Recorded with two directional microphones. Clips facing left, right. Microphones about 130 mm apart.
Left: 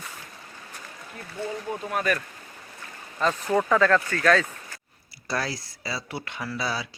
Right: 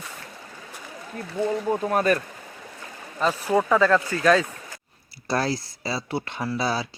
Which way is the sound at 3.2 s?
10° right (ahead or behind).